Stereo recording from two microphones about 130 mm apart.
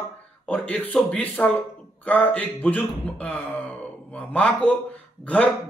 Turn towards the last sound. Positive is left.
turn(degrees=10)  # may be behind; listen again after turning